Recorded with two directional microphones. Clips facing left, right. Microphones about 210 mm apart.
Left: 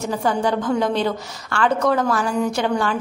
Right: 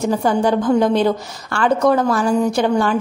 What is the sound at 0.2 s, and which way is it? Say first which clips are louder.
A woman's voice: right 4 dB; 40° right (ahead or behind).